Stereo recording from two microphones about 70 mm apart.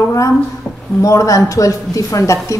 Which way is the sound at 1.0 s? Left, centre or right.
Left.